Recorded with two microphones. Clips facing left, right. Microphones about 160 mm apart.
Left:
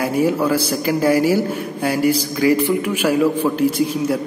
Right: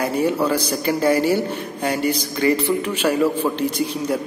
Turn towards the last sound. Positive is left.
turn(degrees=5)  # may be behind; listen again after turning